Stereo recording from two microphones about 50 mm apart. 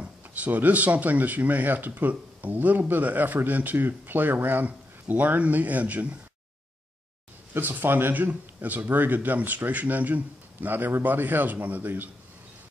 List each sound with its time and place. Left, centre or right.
0.0 s speech: right
7.5 s speech: right